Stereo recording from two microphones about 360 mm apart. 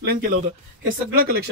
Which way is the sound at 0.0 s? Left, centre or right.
Right.